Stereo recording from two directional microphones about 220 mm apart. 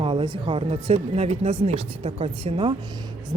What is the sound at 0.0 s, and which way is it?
Speech, 25° right (ahead or behind).